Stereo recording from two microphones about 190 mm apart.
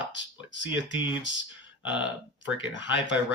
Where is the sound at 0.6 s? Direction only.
25° left (ahead or behind).